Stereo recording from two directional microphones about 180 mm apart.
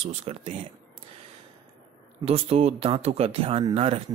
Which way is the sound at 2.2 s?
35° right (ahead or behind).